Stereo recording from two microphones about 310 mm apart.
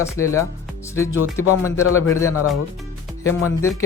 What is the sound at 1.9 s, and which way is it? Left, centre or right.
Speech, left.